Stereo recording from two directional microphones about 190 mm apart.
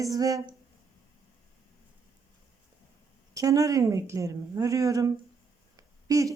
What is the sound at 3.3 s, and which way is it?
Speech, 15° right (ahead or behind).